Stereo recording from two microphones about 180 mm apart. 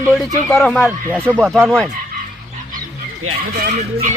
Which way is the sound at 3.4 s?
55° right (ahead or behind).